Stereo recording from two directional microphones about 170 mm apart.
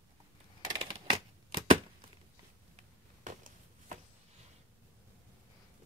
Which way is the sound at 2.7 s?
45° right (ahead or behind).